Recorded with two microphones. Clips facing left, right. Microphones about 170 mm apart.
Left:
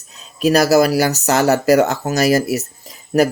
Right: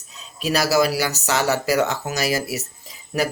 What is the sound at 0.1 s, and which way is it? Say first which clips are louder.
Speech: left 8 dB; 50° left (ahead or behind).